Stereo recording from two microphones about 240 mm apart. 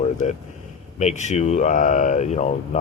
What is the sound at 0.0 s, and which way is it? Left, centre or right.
Speech, left.